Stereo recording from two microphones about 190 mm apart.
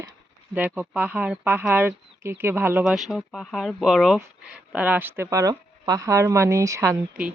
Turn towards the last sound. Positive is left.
turn(degrees=-10)  # may be behind; listen again after turning